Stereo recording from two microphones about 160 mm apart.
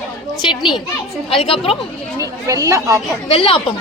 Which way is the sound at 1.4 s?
35° left (ahead or behind).